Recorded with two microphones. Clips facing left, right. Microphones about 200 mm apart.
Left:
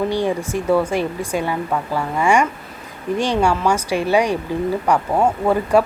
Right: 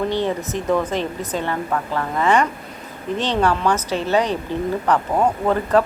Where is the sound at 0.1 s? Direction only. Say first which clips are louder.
Left 2 dB; 10° left (ahead or behind).